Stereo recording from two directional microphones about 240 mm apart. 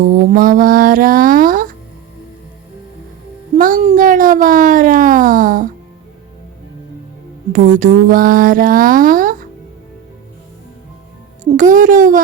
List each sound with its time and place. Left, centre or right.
0.0 s speech: right
3.6 s speech: right
7.5 s speech: right
11.5 s speech: right